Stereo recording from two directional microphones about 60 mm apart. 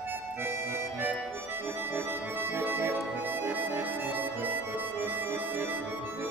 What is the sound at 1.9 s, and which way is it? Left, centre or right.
Music, right.